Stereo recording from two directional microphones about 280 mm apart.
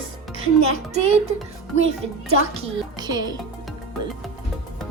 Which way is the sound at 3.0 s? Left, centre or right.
Centre.